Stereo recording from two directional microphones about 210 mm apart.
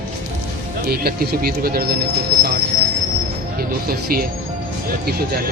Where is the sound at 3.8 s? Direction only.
45° right (ahead or behind).